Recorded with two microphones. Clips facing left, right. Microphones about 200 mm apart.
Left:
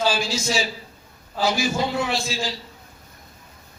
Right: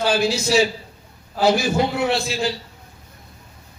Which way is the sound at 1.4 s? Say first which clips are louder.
Right 5 dB; 60° right (ahead or behind).